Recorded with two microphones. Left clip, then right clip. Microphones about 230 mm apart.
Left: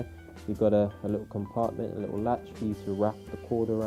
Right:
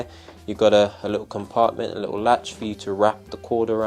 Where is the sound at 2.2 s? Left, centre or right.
Centre.